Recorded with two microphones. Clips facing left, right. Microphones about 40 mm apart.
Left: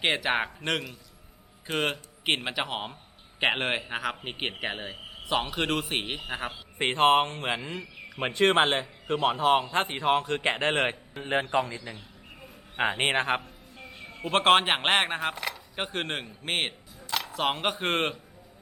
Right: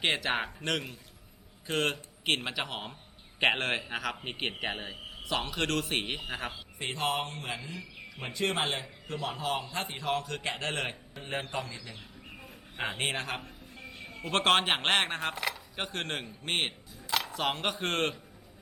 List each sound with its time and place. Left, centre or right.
0.0 s a man's voice: centre
6.7 s a man's voice: left
13.8 s speech: centre
15.7 s speech: centre
17.4 s a man's voice: centre